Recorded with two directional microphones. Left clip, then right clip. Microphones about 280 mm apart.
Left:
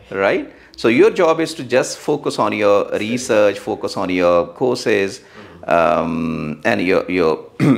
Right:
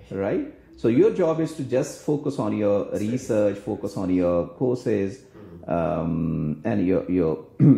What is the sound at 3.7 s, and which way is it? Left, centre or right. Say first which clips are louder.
Speech: left 8 dB; left.